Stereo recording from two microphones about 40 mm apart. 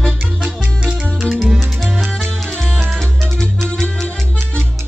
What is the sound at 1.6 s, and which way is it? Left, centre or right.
Music, centre.